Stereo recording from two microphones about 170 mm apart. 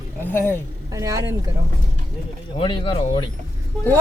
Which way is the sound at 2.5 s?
30° left (ahead or behind).